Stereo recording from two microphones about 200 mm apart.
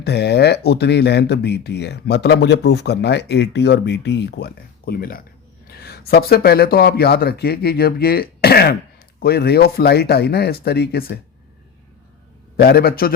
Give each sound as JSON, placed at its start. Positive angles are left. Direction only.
{"t": 0.0, "sound": "speech", "side_deg": 55}
{"t": 12.5, "sound": "speech", "side_deg": 50}